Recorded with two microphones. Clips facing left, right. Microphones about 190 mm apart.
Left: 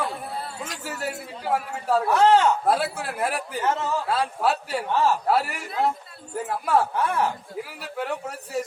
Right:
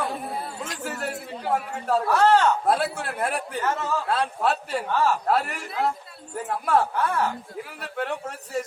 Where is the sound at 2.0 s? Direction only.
20° left (ahead or behind).